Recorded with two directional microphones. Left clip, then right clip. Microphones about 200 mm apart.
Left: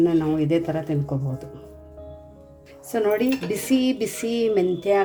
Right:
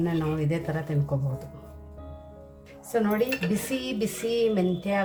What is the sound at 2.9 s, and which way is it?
A woman's voice, 35° left (ahead or behind).